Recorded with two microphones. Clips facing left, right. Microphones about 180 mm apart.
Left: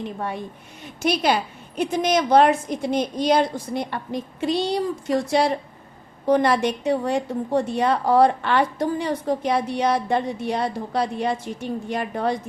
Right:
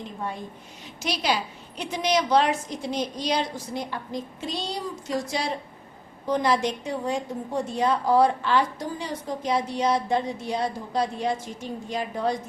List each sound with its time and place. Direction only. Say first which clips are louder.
1.0 s a woman's voice: left 6 dB; 55° left (ahead or behind)